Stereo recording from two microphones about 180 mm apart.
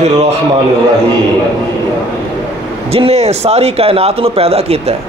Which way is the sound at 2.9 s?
35° right (ahead or behind).